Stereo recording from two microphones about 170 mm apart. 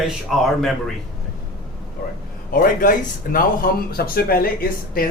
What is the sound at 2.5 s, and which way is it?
Speech, 55° left (ahead or behind).